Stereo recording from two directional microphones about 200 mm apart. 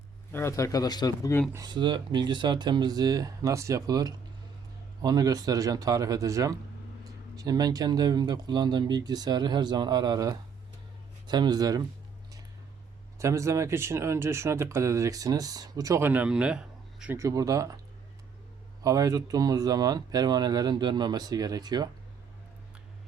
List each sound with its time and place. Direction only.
0.3 s speech: 10° left (ahead or behind)
1.5 s speech: 20° right (ahead or behind)
13.1 s speech: 15° right (ahead or behind)
18.8 s speech: 15° right (ahead or behind)